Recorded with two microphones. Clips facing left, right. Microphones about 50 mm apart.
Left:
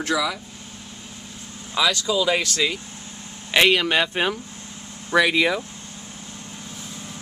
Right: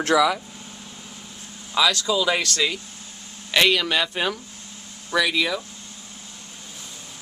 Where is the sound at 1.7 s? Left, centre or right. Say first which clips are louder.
Even; centre.